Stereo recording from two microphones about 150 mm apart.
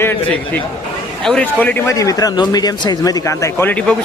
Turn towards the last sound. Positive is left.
turn(degrees=10)  # may be behind; listen again after turning